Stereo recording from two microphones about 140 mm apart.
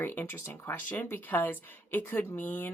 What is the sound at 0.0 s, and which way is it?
Speech, 15° left (ahead or behind).